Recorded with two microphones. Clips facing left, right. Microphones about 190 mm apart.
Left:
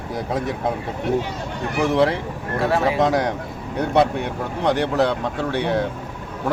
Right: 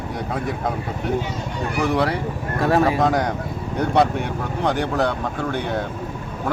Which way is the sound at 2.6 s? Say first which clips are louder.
Right 2 dB; 45° right (ahead or behind).